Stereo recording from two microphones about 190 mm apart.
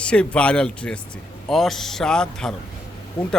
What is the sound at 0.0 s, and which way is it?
A man's voice, 5° left (ahead or behind).